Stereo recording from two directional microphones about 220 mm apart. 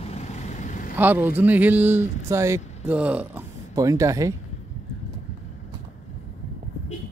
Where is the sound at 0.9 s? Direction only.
10° right (ahead or behind).